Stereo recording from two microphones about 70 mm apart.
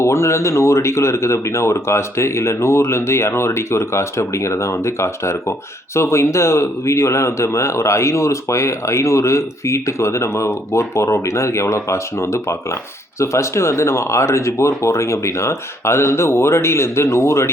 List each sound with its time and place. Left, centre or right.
0.0 s speech: left